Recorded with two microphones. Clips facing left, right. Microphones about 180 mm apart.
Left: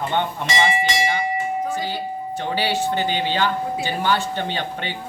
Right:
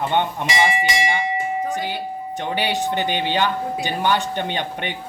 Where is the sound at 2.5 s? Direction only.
20° right (ahead or behind).